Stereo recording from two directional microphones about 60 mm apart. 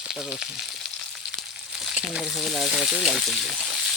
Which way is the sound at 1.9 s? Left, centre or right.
Centre.